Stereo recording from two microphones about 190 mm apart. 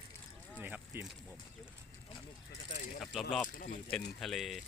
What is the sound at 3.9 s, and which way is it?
Speech, centre (ahead or behind).